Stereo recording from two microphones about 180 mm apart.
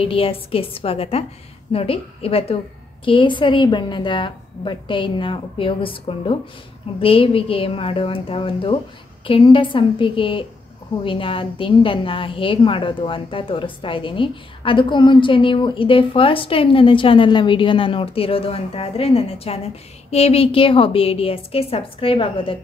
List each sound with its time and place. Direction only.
0.0 s a woman's voice: 30° left (ahead or behind)